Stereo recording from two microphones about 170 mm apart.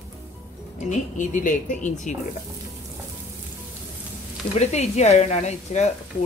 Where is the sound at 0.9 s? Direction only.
50° left (ahead or behind).